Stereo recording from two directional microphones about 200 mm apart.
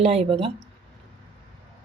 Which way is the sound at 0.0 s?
30° right (ahead or behind).